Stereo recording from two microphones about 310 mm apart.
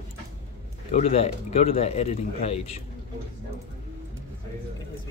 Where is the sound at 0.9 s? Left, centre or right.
Left.